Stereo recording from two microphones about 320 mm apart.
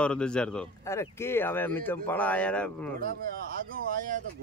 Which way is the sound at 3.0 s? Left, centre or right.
Right.